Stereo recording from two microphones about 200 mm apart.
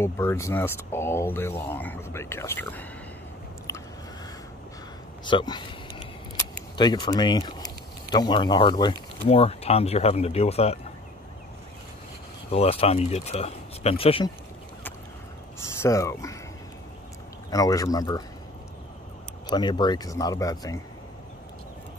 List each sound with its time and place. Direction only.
0.0 s speech: 15° left (ahead or behind)
5.2 s a sound: 20° left (ahead or behind)
6.8 s speech: 20° left (ahead or behind)
12.4 s speech: 30° left (ahead or behind)
15.8 s speech: 15° left (ahead or behind)
17.5 s speech: 20° left (ahead or behind)
19.5 s speech: 20° left (ahead or behind)